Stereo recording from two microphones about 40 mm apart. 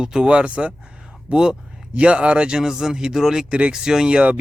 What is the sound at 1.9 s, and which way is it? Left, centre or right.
Speech, right.